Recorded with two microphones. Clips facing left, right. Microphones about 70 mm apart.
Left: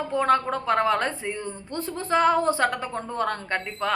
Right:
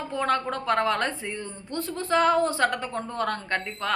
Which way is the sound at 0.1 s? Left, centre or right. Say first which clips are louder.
Left 4 dB; left.